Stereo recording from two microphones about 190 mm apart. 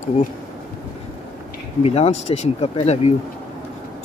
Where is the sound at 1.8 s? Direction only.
35° left (ahead or behind).